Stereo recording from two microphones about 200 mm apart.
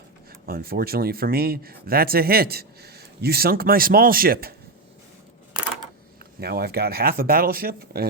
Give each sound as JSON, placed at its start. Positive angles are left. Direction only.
{"t": 0.4, "sound": "speech", "side_deg": -50}
{"t": 6.4, "sound": "speech", "side_deg": -50}